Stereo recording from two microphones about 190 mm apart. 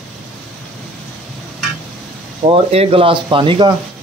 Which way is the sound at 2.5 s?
30° right (ahead or behind).